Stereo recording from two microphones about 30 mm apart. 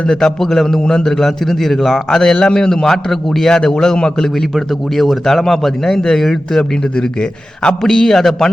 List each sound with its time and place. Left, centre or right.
0.1 s a man's voice: left
1.5 s a man's voice: centre
4.5 s a man's voice: centre
6.6 s a man's voice: left
7.8 s a man's voice: centre